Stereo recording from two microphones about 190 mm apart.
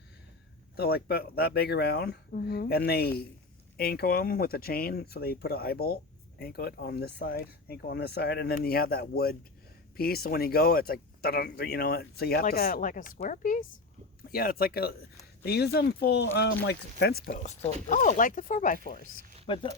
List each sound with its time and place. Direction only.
0.8 s speech: 55° left (ahead or behind)